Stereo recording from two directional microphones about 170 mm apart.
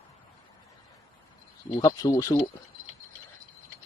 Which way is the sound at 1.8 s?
20° left (ahead or behind).